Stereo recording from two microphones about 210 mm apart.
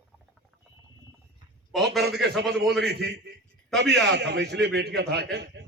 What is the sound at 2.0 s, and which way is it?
A man's voice, 50° right (ahead or behind).